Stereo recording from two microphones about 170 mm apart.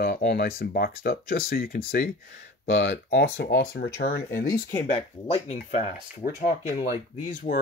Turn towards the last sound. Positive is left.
turn(degrees=50)  # may be behind; listen again after turning